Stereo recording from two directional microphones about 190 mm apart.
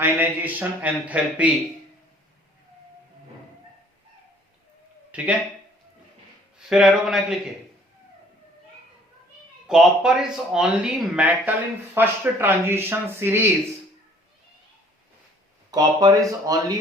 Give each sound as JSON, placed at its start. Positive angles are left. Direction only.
{"t": 0.0, "sound": "speech", "side_deg": -10}
{"t": 5.1, "sound": "speech", "side_deg": -5}
{"t": 6.7, "sound": "speech", "side_deg": 0}
{"t": 9.6, "sound": "speech", "side_deg": -5}
{"t": 15.7, "sound": "speech", "side_deg": -20}